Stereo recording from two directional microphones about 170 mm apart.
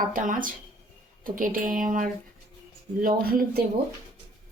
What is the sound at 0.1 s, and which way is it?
A woman's voice, 50° right (ahead or behind).